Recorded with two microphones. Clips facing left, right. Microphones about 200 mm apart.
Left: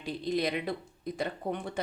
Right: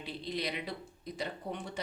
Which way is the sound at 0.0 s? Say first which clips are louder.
Left 7 dB; 45° left (ahead or behind).